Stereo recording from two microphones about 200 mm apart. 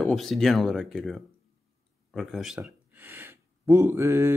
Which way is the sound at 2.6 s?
10° right (ahead or behind).